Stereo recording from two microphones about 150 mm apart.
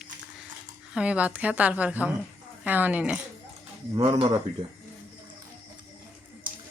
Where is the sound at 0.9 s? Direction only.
5° right (ahead or behind).